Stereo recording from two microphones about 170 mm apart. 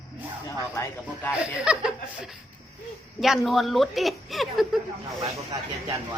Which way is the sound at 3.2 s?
Centre (ahead or behind).